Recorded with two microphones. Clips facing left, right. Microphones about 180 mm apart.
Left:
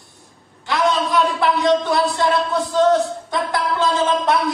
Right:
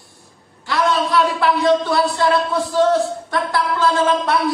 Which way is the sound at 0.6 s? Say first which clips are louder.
Even; 20° left (ahead or behind).